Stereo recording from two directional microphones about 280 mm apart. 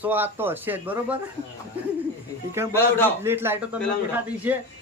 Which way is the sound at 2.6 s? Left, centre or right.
Centre.